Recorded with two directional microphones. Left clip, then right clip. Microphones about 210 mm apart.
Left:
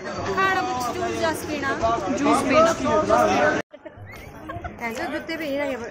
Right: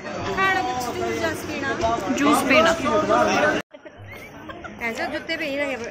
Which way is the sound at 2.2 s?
5° right (ahead or behind).